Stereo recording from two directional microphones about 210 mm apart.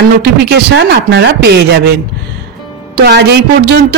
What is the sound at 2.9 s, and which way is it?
Speech, 50° right (ahead or behind).